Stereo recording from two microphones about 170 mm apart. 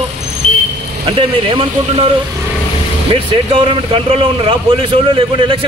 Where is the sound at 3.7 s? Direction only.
30° right (ahead or behind).